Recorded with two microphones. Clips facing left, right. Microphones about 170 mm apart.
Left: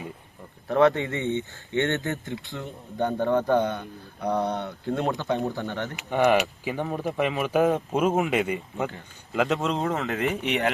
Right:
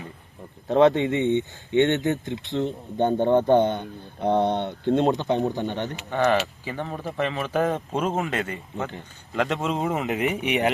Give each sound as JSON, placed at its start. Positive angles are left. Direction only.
{"t": 0.7, "sound": "speech", "side_deg": -20}
{"t": 6.0, "sound": "speech", "side_deg": 15}
{"t": 9.3, "sound": "speech", "side_deg": 0}
{"t": 9.8, "sound": "speech", "side_deg": -15}